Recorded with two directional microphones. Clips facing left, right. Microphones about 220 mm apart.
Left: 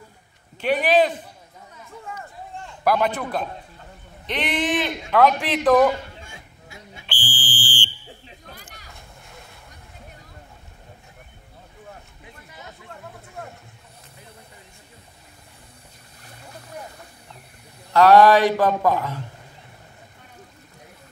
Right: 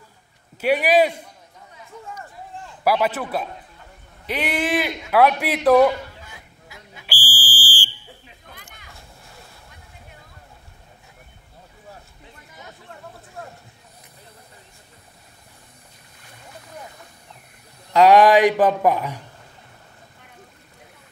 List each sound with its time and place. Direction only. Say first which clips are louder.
0.6 s speech: right 1 dB; 10° right (ahead or behind)
2.6 s a man's voice: right 1 dB; 5° right (ahead or behind)
6.2 s a sound: left 1 dB; 25° left (ahead or behind)
7.1 s speech: left 1 dB; 10° right (ahead or behind)
8.5 s vehicle: left 2 dB; 35° left (ahead or behind)
17.9 s speech: even; 15° right (ahead or behind)